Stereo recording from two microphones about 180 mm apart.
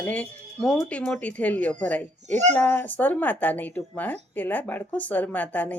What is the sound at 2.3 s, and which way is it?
Speech, 40° right (ahead or behind).